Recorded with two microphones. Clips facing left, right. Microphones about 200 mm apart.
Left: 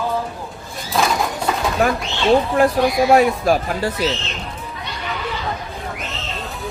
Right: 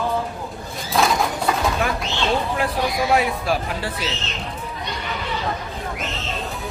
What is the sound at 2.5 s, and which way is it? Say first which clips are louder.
Speech: left 7 dB; 45° left (ahead or behind).